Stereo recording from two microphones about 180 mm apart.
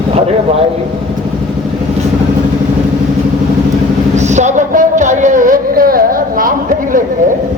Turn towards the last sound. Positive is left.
turn(degrees=-50)  # may be behind; listen again after turning